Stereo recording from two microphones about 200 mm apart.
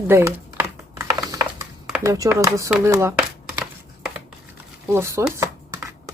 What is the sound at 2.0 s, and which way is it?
Speech, 15° right (ahead or behind).